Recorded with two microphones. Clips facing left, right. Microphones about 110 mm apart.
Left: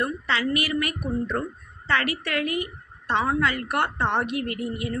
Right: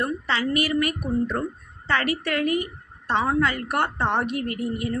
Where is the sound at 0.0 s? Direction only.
35° right (ahead or behind).